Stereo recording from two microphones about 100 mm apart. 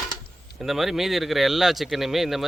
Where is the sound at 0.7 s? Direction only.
5° right (ahead or behind).